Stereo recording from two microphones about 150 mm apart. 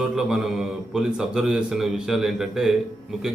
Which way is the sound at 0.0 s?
5° right (ahead or behind).